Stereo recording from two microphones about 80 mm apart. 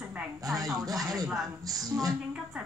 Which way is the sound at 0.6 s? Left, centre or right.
Right.